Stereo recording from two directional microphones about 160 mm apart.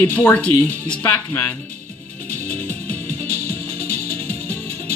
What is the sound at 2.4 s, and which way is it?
Music, 15° left (ahead or behind).